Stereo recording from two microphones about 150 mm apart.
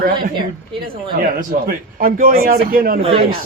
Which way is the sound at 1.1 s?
75° right (ahead or behind).